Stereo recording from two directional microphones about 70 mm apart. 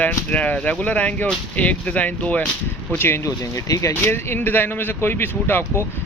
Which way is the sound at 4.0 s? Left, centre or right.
Left.